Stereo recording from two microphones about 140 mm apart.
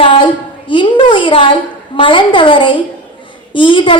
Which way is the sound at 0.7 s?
35° left (ahead or behind).